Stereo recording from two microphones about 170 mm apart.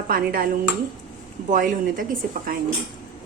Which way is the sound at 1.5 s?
50° right (ahead or behind).